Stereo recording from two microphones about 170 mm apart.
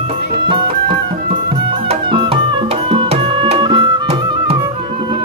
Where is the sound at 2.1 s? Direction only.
30° right (ahead or behind).